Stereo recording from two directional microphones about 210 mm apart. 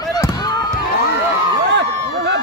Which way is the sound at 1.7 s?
55° right (ahead or behind).